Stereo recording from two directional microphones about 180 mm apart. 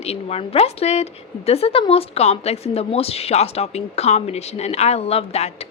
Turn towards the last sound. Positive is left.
turn(degrees=35)  # may be behind; listen again after turning